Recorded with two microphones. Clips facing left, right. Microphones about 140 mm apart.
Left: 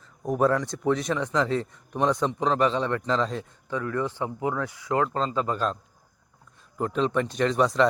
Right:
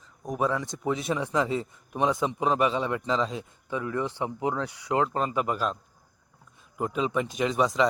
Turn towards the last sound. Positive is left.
turn(degrees=0)  # may be behind; listen again after turning